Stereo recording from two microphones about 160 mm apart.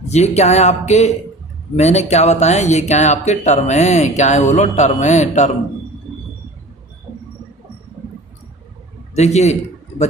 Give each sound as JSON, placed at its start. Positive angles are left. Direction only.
{"t": 0.1, "sound": "speech", "side_deg": 45}
{"t": 9.1, "sound": "speech", "side_deg": 45}